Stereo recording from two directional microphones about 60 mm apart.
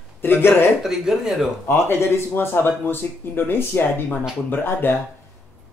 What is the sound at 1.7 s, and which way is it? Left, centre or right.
Speech, left.